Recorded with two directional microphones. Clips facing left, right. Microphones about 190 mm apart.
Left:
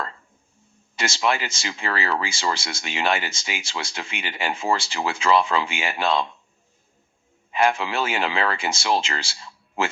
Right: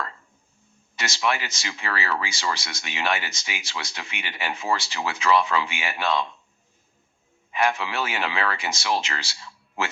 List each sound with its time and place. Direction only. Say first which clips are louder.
0.9 s speech: left 3 dB; 30° left (ahead or behind)
7.5 s speech: left 3 dB; 30° left (ahead or behind)